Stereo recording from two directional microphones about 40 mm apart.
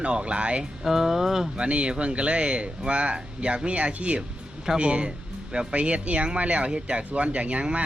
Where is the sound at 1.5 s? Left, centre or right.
Right.